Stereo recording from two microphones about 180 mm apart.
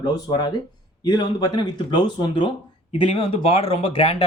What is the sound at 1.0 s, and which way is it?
Speech, 25° left (ahead or behind).